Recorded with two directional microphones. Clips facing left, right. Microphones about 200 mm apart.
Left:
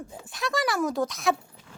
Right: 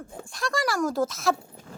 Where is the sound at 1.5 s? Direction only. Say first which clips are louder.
Right 7 dB; 40° right (ahead or behind).